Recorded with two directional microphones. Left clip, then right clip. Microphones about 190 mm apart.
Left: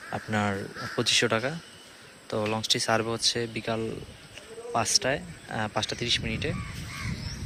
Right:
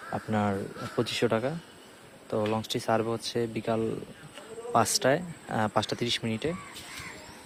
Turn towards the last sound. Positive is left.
turn(degrees=-15)  # may be behind; listen again after turning